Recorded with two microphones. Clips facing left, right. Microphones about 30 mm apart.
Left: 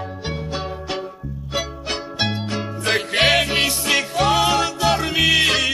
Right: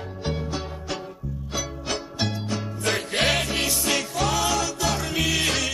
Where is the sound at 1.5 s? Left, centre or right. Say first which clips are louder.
Left 5 dB; left.